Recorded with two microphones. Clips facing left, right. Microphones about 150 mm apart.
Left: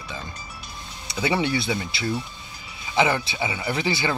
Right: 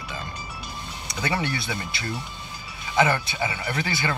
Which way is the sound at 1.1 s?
10° left (ahead or behind).